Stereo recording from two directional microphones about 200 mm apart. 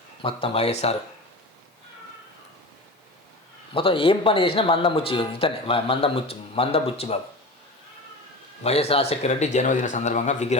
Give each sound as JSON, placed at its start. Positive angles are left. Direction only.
{"t": 0.2, "sound": "speech", "side_deg": 25}
{"t": 3.8, "sound": "speech", "side_deg": 25}
{"t": 8.6, "sound": "a man's voice", "side_deg": 30}